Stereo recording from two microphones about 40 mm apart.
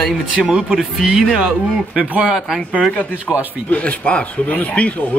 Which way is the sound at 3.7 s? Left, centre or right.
Left.